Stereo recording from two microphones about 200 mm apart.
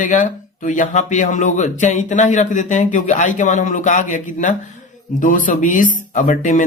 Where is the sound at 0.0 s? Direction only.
40° left (ahead or behind).